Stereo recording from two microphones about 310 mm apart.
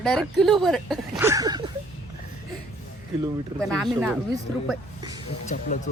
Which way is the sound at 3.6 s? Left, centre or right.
Centre.